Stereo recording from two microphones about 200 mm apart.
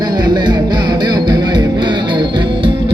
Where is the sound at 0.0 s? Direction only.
20° right (ahead or behind).